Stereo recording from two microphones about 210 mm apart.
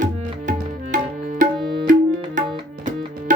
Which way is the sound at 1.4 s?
35° right (ahead or behind).